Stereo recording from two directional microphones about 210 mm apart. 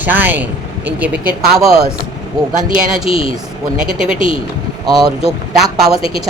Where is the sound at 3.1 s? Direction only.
25° left (ahead or behind).